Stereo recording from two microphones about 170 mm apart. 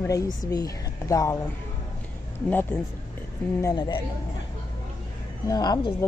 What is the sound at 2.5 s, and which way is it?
Speech, 10° left (ahead or behind).